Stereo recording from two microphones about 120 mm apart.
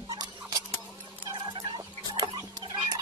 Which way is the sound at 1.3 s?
40° right (ahead or behind).